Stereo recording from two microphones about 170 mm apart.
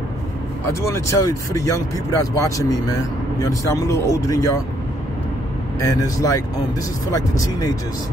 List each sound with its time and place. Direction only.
0.7 s speech: 15° left (ahead or behind)
5.8 s speech: 20° left (ahead or behind)